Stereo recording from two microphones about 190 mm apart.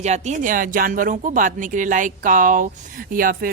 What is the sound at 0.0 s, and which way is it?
A woman's voice, 35° right (ahead or behind).